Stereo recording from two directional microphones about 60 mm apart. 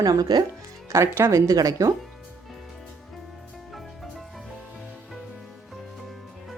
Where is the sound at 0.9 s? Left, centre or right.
Right.